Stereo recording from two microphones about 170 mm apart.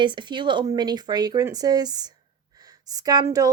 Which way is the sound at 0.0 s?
30° right (ahead or behind).